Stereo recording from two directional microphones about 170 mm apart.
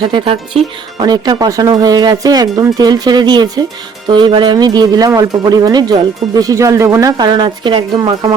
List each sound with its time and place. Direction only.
0.0 s speech: 30° right (ahead or behind)